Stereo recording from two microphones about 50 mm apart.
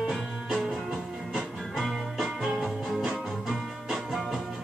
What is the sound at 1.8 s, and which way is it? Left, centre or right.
Music, centre.